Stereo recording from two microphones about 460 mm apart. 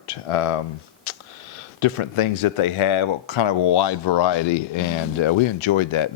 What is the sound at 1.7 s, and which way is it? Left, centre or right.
Speech, left.